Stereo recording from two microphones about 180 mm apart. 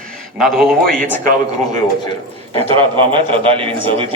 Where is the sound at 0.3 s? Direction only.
Centre (ahead or behind).